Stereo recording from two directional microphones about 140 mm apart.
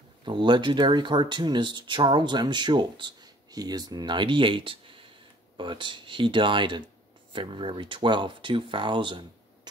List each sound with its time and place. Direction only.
0.2 s speech: 35° right (ahead or behind)